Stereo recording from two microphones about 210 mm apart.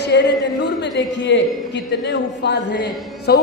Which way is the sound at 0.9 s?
60° left (ahead or behind).